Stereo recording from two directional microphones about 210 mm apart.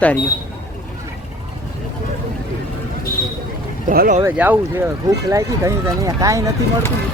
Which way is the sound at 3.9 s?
40° right (ahead or behind).